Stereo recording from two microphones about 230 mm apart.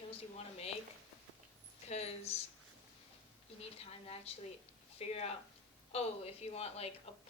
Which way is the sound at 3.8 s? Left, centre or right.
Left.